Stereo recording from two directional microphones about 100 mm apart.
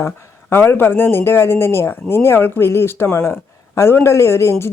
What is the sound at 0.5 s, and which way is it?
A woman's voice, 20° left (ahead or behind).